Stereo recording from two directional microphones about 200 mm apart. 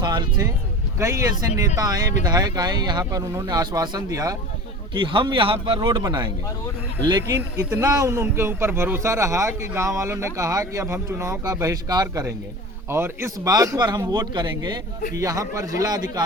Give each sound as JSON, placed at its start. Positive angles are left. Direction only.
{"t": 0.0, "sound": "speech", "side_deg": -20}